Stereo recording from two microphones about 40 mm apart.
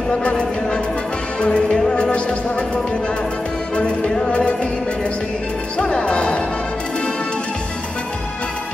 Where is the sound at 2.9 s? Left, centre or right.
Left.